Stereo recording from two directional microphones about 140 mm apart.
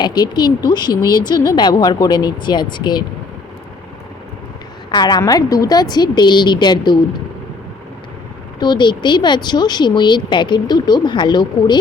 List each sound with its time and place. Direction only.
0.0 s speech: 30° left (ahead or behind)
4.9 s speech: 30° left (ahead or behind)
8.5 s speech: 30° left (ahead or behind)